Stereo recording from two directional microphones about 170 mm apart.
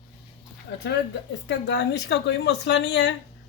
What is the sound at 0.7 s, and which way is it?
A woman's voice, 80° left.